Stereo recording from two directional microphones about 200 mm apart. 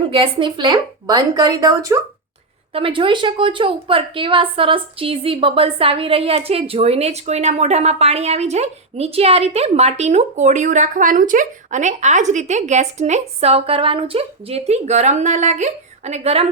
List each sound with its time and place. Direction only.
0.1 s a woman's voice: 25° right (ahead or behind)